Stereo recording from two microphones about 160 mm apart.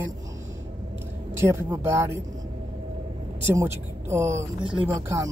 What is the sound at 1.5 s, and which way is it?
Speech, 15° right (ahead or behind).